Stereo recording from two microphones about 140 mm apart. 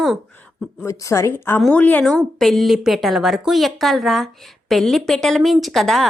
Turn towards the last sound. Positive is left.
turn(degrees=0)  # may be behind; listen again after turning